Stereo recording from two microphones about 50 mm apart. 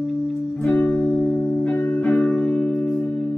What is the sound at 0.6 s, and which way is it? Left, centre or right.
Music, left.